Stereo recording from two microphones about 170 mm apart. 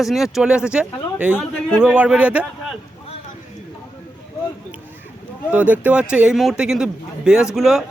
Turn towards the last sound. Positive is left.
turn(degrees=0)  # may be behind; listen again after turning